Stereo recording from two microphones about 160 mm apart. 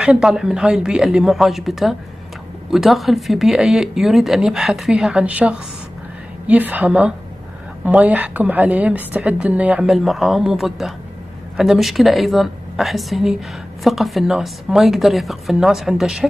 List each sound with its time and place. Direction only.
0.0 s a woman's voice: 5° right (ahead or behind)